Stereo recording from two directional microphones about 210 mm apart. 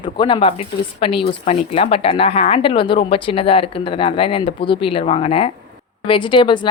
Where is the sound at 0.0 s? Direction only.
20° left (ahead or behind).